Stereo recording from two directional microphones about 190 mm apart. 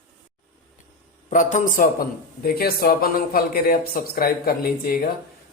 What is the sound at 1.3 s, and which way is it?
A man's voice, 40° left (ahead or behind).